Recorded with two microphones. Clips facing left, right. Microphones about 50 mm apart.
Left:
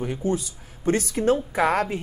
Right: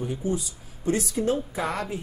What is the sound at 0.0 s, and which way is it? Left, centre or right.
Speech, left.